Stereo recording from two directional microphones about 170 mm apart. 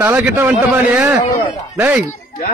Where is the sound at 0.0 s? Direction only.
15° right (ahead or behind).